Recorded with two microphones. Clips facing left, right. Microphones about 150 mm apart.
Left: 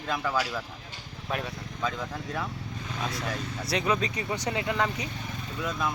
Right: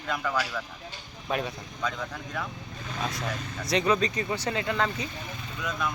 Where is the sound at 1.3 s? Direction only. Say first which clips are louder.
Right 3 dB; centre (ahead or behind).